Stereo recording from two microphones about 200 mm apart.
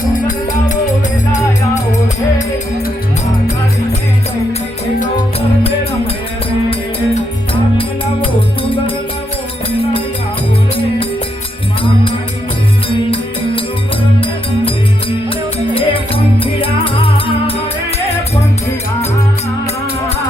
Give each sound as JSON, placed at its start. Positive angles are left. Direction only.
{"t": 1.3, "sound": "music", "side_deg": 35}
{"t": 15.7, "sound": "music", "side_deg": 25}